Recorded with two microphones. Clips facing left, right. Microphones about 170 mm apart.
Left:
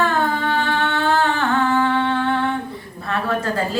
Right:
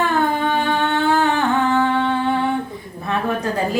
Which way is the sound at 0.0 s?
15° right (ahead or behind).